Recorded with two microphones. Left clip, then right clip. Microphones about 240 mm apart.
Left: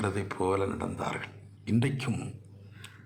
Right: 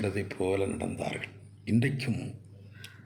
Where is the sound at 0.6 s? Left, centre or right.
Left.